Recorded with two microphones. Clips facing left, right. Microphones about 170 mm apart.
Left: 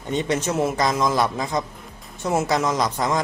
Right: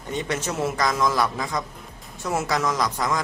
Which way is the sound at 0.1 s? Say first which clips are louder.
Left 5 dB; 20° left (ahead or behind).